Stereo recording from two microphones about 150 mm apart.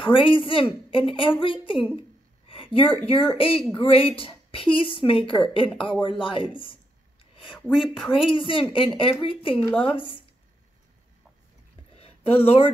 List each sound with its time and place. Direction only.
0.0 s a woman's voice: 35° left (ahead or behind)
7.5 s speech: 5° right (ahead or behind)
8.1 s a woman's voice: 35° left (ahead or behind)
12.0 s speech: 40° left (ahead or behind)